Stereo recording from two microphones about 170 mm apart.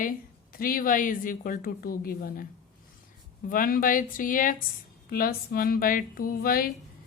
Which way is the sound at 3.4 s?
55° left (ahead or behind).